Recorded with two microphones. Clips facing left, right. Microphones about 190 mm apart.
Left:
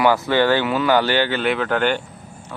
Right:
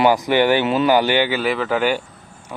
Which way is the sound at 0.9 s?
15° right (ahead or behind).